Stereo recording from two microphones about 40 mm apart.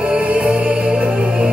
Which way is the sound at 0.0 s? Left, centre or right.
Right.